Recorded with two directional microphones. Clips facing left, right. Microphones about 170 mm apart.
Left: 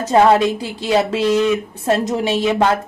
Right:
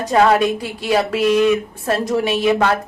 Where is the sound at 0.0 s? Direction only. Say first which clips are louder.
Left 2 dB; 25° left (ahead or behind).